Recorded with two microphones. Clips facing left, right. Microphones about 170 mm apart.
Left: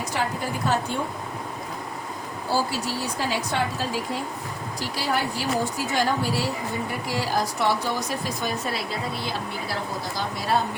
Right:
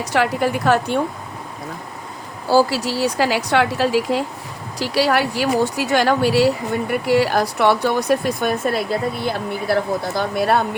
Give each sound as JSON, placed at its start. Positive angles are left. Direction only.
{"t": 0.0, "sound": "speech", "side_deg": -75}
{"t": 2.5, "sound": "a woman's voice", "side_deg": -90}